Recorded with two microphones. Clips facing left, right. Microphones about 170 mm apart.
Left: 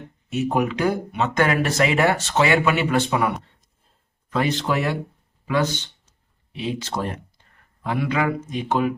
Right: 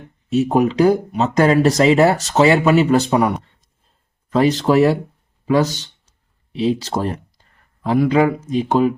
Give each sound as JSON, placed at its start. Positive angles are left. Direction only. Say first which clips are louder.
{"t": 0.3, "sound": "speech", "louder": "right 7 dB", "side_deg": -35}